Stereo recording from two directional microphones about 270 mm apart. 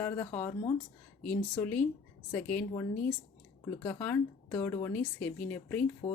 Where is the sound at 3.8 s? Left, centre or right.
Centre.